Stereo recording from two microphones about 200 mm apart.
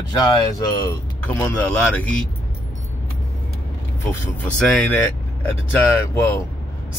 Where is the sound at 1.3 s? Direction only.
10° left (ahead or behind).